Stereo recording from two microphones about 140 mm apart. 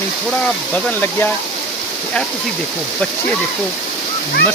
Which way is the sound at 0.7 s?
15° left (ahead or behind).